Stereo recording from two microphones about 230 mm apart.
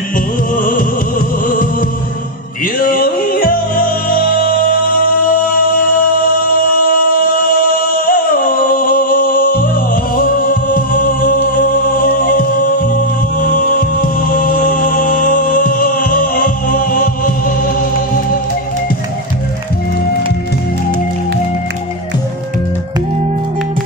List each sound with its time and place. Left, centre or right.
0.6 s music: left
2.6 s music: left
7.9 s music: left